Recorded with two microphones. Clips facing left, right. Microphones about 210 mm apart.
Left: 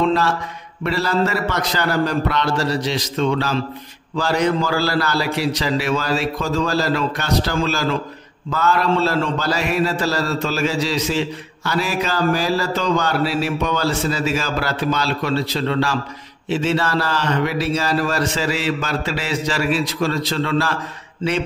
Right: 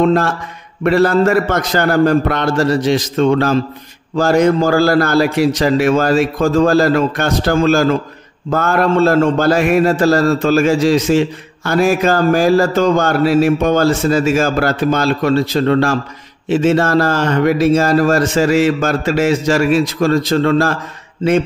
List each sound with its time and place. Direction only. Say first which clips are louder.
0.0 s a man's voice: right 5 dB; 50° right (ahead or behind)